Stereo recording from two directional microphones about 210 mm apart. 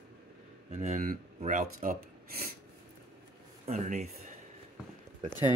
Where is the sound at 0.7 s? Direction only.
35° right (ahead or behind).